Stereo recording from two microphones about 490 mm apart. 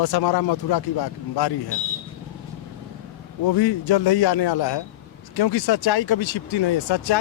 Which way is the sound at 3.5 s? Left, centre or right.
Left.